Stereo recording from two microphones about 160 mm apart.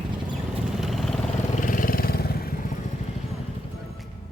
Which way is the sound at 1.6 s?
60° left (ahead or behind).